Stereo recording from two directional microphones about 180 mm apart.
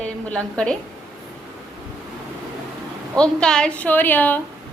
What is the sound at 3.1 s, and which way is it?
A woman's voice, 5° left (ahead or behind).